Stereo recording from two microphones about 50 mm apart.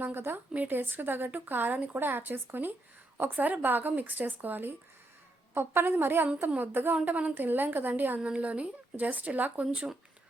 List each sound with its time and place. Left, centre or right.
0.0 s a woman's voice: right
5.5 s a woman's voice: right
7.0 s speech: right
8.2 s speech: right